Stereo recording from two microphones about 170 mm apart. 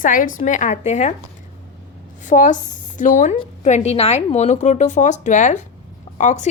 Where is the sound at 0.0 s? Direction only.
50° left (ahead or behind).